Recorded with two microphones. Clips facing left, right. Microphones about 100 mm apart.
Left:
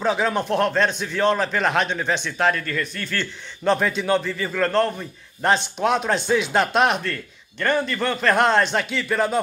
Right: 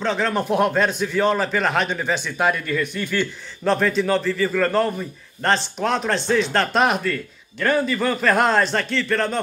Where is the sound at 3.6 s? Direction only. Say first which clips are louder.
Right 1 dB; centre (ahead or behind).